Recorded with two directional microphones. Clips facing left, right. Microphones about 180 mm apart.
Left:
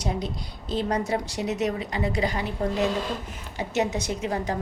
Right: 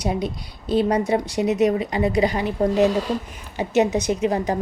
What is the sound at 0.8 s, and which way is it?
A woman's voice, 20° right (ahead or behind).